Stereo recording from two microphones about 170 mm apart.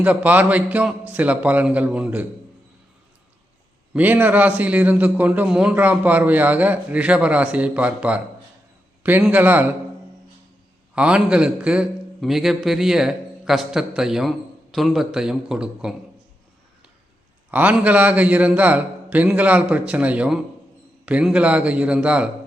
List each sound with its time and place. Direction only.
0.0 s a man's voice: 10° right (ahead or behind)
3.9 s a man's voice: 10° right (ahead or behind)
10.9 s a man's voice: 5° right (ahead or behind)
17.5 s a man's voice: 10° right (ahead or behind)